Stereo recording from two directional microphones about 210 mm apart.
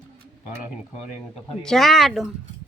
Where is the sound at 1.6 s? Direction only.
Centre (ahead or behind).